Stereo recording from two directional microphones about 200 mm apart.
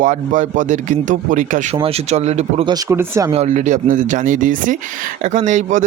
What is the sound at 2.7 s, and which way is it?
Speech, 15° right (ahead or behind).